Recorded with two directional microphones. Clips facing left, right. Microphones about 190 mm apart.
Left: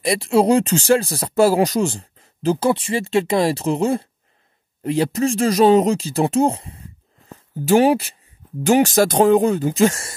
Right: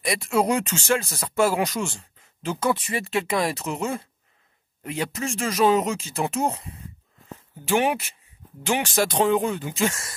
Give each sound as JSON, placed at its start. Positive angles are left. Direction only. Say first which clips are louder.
{"t": 0.0, "sound": "speech", "louder": "left 6 dB", "side_deg": 30}